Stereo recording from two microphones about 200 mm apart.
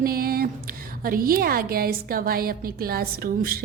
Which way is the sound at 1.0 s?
45° right (ahead or behind).